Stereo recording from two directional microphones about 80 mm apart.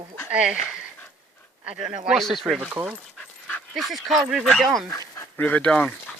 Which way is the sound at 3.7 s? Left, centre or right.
Centre.